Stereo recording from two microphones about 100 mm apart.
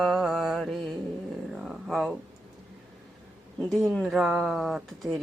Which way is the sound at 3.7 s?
5° left (ahead or behind).